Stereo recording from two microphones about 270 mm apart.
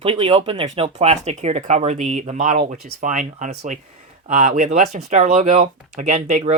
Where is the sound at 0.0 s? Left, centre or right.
Right.